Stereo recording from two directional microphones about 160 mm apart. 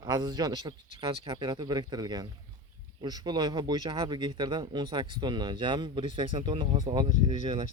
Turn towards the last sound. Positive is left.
turn(degrees=-40)  # may be behind; listen again after turning